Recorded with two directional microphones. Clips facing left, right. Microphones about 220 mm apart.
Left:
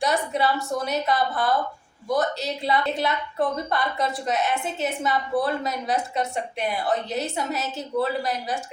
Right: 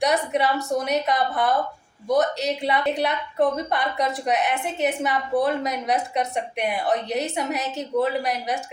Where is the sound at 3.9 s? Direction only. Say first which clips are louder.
Right 2 dB; 15° right (ahead or behind).